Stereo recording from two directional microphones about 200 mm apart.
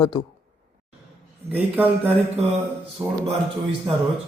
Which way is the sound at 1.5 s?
10° right (ahead or behind).